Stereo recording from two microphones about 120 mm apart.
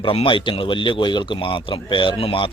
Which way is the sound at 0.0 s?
50° left (ahead or behind).